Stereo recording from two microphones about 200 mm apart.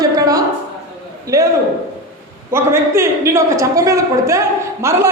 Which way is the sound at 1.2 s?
15° right (ahead or behind).